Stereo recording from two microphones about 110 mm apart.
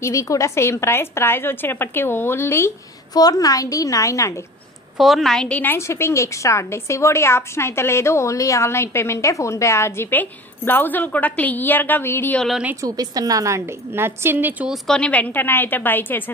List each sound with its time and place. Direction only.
0.0 s a woman's voice: 30° left (ahead or behind)
3.1 s a woman's voice: 35° left (ahead or behind)
4.9 s a woman's voice: centre (ahead or behind); by 12.4 s 20° left (ahead or behind)
12.4 s a woman's voice: centre (ahead or behind)
12.8 s a woman's voice: 35° right (ahead or behind); by 14.7 s 20° right (ahead or behind)
14.7 s a woman's voice: 5° left (ahead or behind)